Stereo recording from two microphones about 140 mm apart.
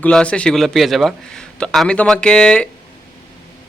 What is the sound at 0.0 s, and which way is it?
A man's voice, 10° left (ahead or behind).